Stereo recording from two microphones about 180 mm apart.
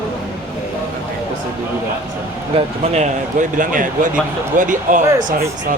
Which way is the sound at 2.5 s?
40° right (ahead or behind).